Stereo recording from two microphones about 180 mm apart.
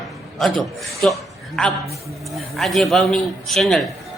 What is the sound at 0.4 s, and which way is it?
A woman's voice, centre (ahead or behind).